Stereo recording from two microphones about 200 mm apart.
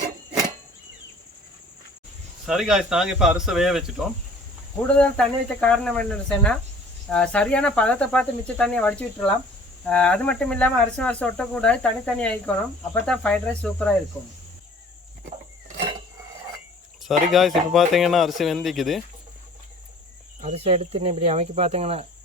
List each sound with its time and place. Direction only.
2.5 s speech: 5° right (ahead or behind)
17.0 s speech: centre (ahead or behind)
20.4 s speech: 30° right (ahead or behind)